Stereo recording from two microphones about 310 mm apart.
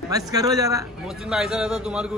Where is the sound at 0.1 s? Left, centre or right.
Centre.